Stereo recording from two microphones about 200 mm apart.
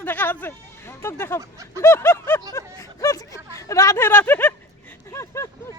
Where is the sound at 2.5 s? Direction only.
15° left (ahead or behind).